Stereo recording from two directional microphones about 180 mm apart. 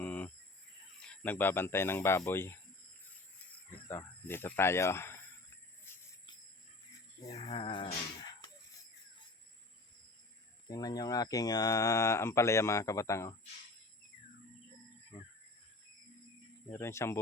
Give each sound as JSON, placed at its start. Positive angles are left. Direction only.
{"t": 0.0, "sound": "cricket", "side_deg": 10}
{"t": 0.9, "sound": "speech", "side_deg": 5}
{"t": 3.8, "sound": "cricket", "side_deg": 15}
{"t": 7.3, "sound": "a sound", "side_deg": 35}
{"t": 10.7, "sound": "speech", "side_deg": 20}
{"t": 15.1, "sound": "a sound", "side_deg": 40}
{"t": 16.7, "sound": "speech", "side_deg": 15}